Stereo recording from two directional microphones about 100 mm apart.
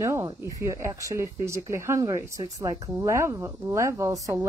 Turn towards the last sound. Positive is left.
turn(degrees=-30)  # may be behind; listen again after turning